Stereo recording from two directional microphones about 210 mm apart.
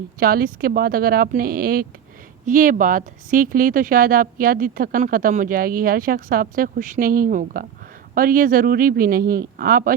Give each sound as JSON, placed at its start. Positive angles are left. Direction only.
{"t": 0.2, "sound": "speech", "side_deg": -45}